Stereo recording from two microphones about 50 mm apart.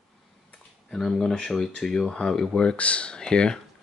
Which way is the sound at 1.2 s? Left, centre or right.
Centre.